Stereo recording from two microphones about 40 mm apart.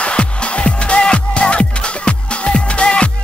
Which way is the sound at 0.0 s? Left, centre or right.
Left.